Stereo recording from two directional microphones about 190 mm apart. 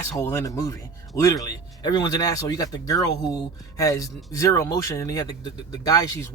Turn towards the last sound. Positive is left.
turn(degrees=20)  # may be behind; listen again after turning